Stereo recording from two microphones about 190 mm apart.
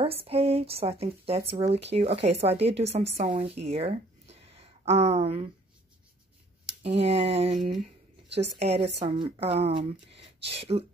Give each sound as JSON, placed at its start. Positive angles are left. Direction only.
{"t": 0.0, "sound": "speech", "side_deg": -30}
{"t": 6.8, "sound": "speech", "side_deg": -30}
{"t": 8.3, "sound": "a woman's voice", "side_deg": -65}
{"t": 8.5, "sound": "speech", "side_deg": -35}